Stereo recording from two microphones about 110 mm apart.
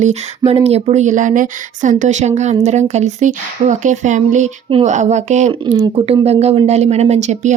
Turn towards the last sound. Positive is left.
turn(degrees=-90)